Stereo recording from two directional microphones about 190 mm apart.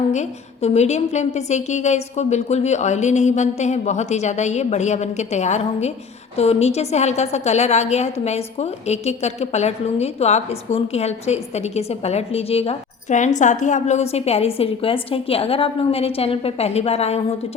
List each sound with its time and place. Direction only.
0.1 s a woman's voice: 35° left (ahead or behind)